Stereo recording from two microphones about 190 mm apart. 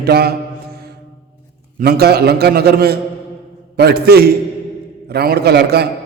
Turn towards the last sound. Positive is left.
turn(degrees=-60)  # may be behind; listen again after turning